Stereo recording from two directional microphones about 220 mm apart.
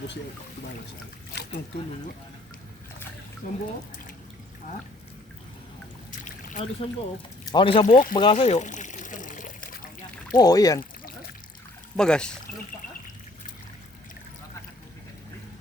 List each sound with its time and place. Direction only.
3.4 s speech: 35° left (ahead or behind)
6.1 s trickle: 35° left (ahead or behind)
7.5 s speech: 25° left (ahead or behind)
8.1 s pour: 25° left (ahead or behind)
10.3 s speech: 15° left (ahead or behind)
11.9 s speech: 5° left (ahead or behind)